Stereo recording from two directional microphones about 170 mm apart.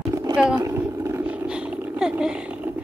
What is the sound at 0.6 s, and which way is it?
Roaring cats, 20° right (ahead or behind).